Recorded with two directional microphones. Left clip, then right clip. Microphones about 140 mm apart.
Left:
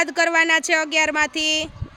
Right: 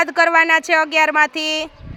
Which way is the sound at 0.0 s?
15° left (ahead or behind).